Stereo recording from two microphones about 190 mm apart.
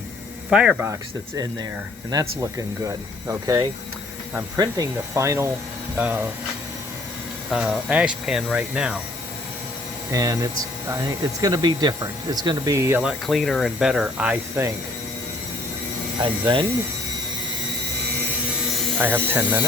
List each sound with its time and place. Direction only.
0.5 s speech: 5° right (ahead or behind)
2.0 s speech: 20° right (ahead or behind)
7.5 s speech: 5° right (ahead or behind)
10.1 s speech: 20° right (ahead or behind)
13.0 s speech: centre (ahead or behind)
16.2 s speech: 25° right (ahead or behind)
18.9 s speech: 10° right (ahead or behind)